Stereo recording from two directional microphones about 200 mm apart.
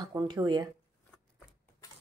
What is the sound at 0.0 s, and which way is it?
Speech, 20° right (ahead or behind).